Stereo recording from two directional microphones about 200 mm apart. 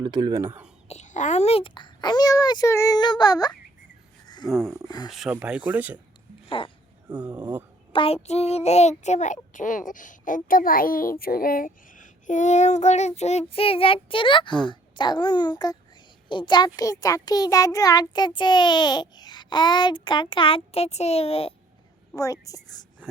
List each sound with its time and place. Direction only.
0.0 s speech: 20° right (ahead or behind)
0.9 s a child's voice: 35° left (ahead or behind); by 3.5 s 20° left (ahead or behind)
5.0 s speech: centre (ahead or behind)
7.2 s speech: 5° right (ahead or behind)
7.9 s a child's voice: 30° left (ahead or behind)
22.1 s speech: 15° left (ahead or behind)